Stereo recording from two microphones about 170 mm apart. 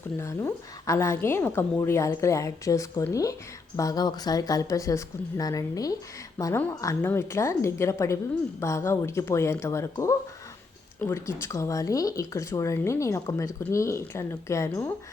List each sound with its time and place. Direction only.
0.2 s speech: 15° left (ahead or behind)